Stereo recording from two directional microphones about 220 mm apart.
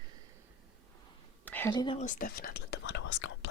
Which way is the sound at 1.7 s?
20° left (ahead or behind).